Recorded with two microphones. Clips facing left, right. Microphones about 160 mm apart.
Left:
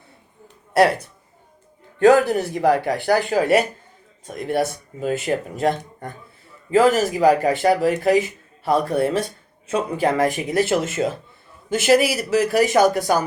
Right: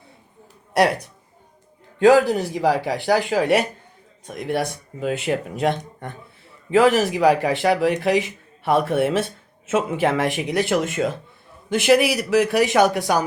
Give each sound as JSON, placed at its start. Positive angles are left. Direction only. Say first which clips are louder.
{"t": 2.1, "sound": "speech", "louder": "right 1 dB", "side_deg": 0}
{"t": 11.0, "sound": "a man's voice", "louder": "even", "side_deg": 20}
{"t": 11.8, "sound": "speech", "louder": "even", "side_deg": 0}